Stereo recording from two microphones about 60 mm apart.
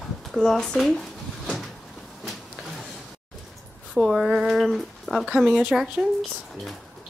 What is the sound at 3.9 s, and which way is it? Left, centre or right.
Speech, centre.